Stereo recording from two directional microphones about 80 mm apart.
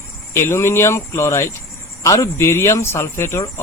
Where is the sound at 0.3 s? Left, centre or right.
Left.